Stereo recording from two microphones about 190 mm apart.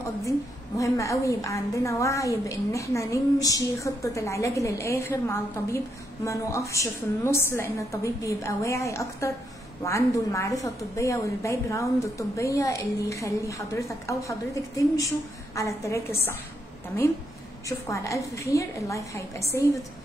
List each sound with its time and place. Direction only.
0.7 s a woman's voice: 15° left (ahead or behind)
17.6 s a woman's voice: 15° left (ahead or behind)